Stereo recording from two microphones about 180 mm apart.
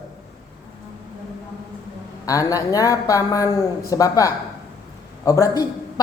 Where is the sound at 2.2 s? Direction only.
20° left (ahead or behind).